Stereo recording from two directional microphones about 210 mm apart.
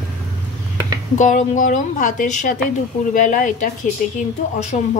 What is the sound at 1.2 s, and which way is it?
A woman's voice, 35° left (ahead or behind).